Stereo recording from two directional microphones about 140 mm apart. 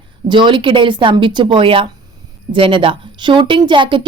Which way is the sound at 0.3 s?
35° right (ahead or behind).